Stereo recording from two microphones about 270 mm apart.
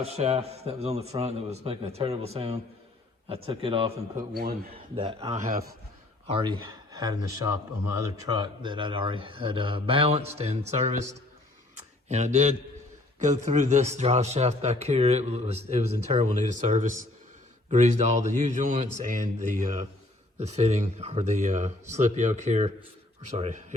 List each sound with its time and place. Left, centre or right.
0.0 s a man's voice: right
6.2 s a man's voice: centre
12.0 s a man's voice: right